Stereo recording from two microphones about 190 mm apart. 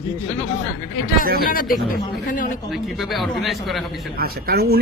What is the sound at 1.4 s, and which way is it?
Speech, 50° left (ahead or behind).